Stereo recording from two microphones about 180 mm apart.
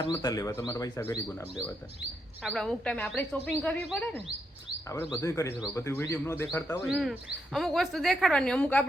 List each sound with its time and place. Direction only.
0.2 s speech: 20° left (ahead or behind)
2.4 s speech: centre (ahead or behind)
4.9 s speech: 15° left (ahead or behind)
6.9 s speech: centre (ahead or behind)